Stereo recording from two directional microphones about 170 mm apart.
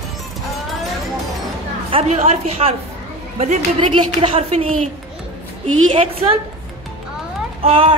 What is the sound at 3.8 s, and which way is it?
A woman's voice, 35° right (ahead or behind).